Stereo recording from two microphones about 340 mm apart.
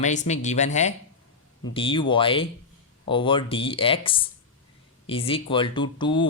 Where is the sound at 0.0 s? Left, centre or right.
Left.